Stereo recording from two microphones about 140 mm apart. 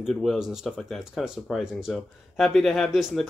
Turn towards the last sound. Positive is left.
turn(degrees=0)  # may be behind; listen again after turning